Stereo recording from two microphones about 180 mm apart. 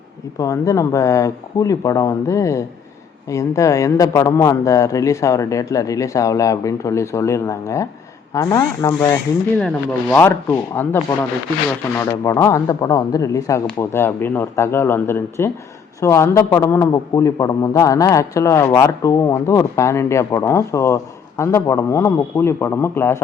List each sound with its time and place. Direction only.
0.3 s a man's voice: 15° left (ahead or behind)
9.6 s a man's voice: 5° left (ahead or behind)